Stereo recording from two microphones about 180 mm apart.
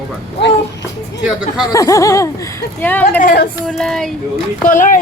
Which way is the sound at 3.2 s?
60° left (ahead or behind).